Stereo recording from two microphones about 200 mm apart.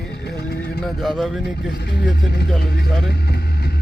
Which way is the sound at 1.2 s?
Centre (ahead or behind).